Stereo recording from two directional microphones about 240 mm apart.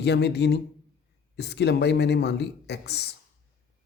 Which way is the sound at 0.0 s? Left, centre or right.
Left.